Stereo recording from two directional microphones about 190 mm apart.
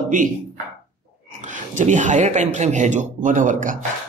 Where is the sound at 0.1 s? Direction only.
45° right (ahead or behind).